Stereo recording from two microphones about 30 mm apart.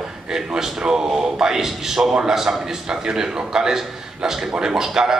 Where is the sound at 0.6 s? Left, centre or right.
Centre.